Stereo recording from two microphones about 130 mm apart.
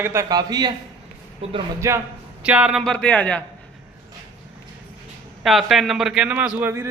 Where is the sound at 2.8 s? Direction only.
5° left (ahead or behind).